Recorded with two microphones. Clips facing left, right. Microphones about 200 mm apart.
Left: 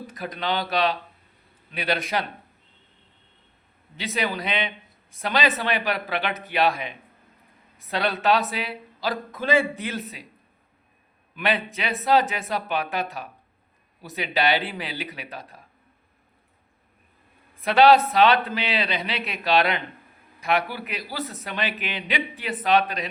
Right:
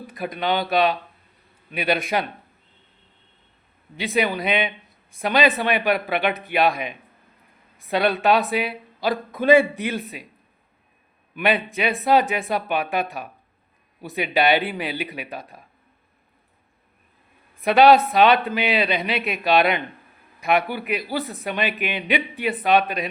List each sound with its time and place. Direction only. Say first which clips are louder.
0.2 s a man's voice: right 4 dB; 10° right (ahead or behind)
3.9 s a man's voice: right 5 dB; 15° right (ahead or behind)
11.8 s a man's voice: right 2 dB; 15° right (ahead or behind)
14.2 s a man's voice: right 4 dB; 15° right (ahead or behind)
17.6 s a man's voice: right 2 dB; 15° right (ahead or behind)